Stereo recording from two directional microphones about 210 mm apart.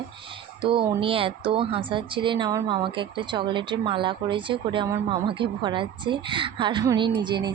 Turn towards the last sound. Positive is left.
turn(degrees=-20)  # may be behind; listen again after turning